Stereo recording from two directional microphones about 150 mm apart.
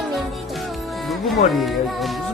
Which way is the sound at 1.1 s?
Centre (ahead or behind).